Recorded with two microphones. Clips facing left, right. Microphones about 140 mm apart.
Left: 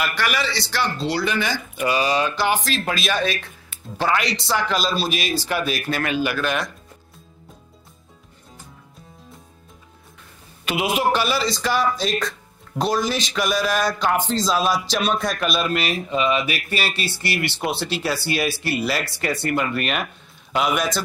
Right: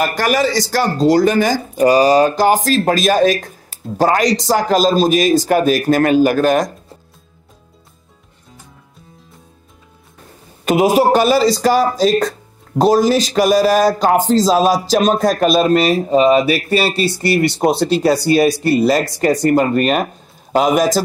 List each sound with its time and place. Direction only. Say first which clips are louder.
0.0 s a man's voice: right 8 dB; 40° right (ahead or behind)
10.6 s a man's voice: right 9 dB; 40° right (ahead or behind)